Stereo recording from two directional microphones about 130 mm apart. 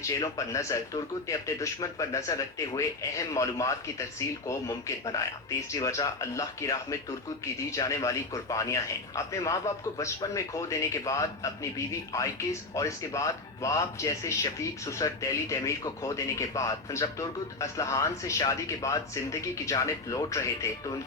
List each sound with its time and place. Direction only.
0.1 s speech: 25° left (ahead or behind)